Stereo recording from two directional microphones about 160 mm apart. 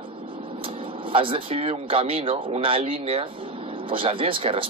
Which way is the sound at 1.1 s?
35° right (ahead or behind).